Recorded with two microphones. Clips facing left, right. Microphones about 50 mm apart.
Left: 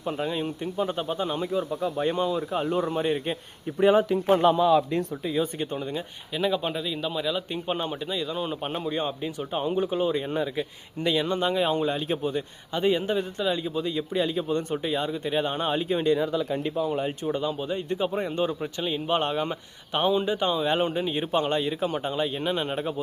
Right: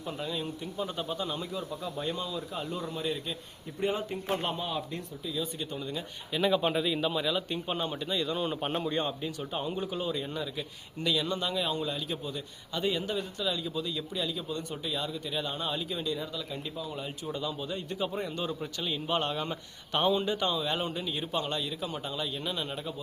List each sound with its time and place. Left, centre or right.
0.0 s speech: left
3.8 s a man's voice: left
4.3 s a man's voice: left
5.3 s speech: left
5.7 s speech: left
6.3 s speech: centre
7.7 s speech: centre; by 16.1 s left
16.1 s speech: left
17.2 s speech: left